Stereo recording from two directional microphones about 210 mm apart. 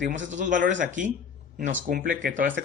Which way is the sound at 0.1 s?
35° right (ahead or behind).